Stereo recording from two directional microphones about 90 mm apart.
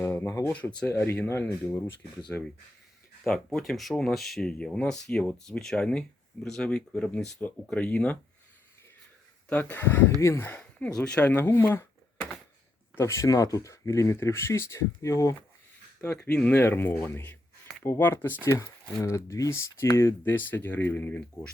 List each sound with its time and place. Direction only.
0.0 s a sound: 25° left (ahead or behind)
0.9 s speech: 25° left (ahead or behind)
3.2 s speech: 5° left (ahead or behind)
9.5 s speech: 20° left (ahead or behind)
10.6 s speech: 10° left (ahead or behind)
13.0 s speech: 35° left (ahead or behind)
16.2 s speech: 15° left (ahead or behind)